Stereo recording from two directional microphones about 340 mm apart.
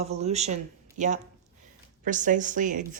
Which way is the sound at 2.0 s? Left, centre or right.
Right.